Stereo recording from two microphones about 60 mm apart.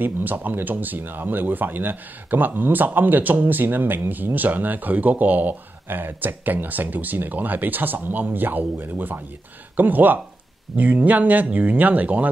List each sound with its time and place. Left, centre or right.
0.0 s speech: right